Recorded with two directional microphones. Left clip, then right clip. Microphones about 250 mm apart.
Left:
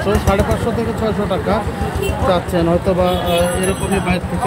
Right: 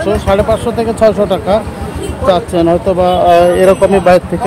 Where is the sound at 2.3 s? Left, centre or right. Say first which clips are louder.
Right 5 dB; centre.